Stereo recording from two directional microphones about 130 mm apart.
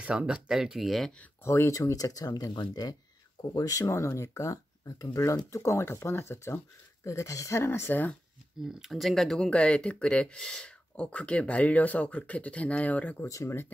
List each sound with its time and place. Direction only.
0.0 s speech: 10° right (ahead or behind)
1.4 s speech: 20° left (ahead or behind)
8.7 s speech: centre (ahead or behind)
13.3 s speech: 20° left (ahead or behind)